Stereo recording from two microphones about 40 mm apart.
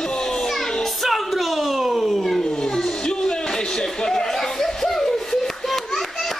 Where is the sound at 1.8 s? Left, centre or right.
Centre.